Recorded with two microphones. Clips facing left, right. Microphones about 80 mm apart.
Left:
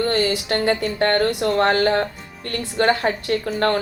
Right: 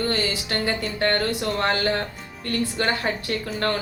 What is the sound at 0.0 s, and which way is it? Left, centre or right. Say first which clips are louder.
A woman's voice: left 5 dB; left.